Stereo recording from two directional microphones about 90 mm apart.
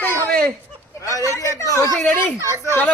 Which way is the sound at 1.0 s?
40° left (ahead or behind).